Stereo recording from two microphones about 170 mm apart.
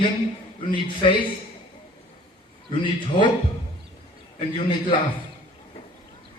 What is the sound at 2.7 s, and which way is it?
Speech, 30° left (ahead or behind).